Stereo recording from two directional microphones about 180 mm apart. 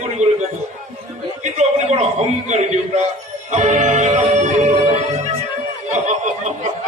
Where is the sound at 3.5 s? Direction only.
40° right (ahead or behind).